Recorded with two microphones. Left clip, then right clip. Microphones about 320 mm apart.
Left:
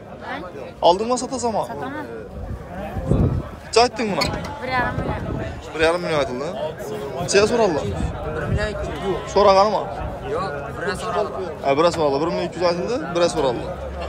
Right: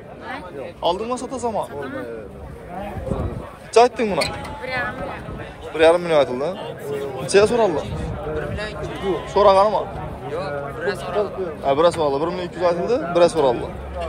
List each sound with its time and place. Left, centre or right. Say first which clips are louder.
0.8 s a man's voice: left 5 dB; centre
3.7 s a man's voice: right 2 dB; centre
4.3 s speech: left 2 dB; left
5.8 s a man's voice: right 4 dB; centre
9.3 s a man's voice: even; centre
10.3 s a man's voice: even; left
11.6 s a man's voice: even; centre